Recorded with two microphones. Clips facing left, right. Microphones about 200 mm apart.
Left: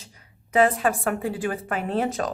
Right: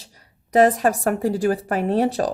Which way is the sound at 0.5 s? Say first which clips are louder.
Right 4 dB; 40° right (ahead or behind).